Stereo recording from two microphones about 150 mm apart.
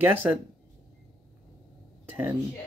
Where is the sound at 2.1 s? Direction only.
15° right (ahead or behind).